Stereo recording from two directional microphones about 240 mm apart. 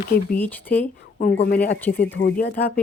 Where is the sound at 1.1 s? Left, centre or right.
Left.